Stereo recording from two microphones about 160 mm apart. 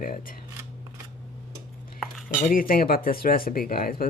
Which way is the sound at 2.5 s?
60° left (ahead or behind).